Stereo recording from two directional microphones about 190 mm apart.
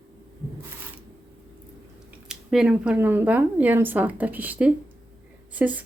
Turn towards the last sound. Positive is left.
turn(degrees=-10)  # may be behind; listen again after turning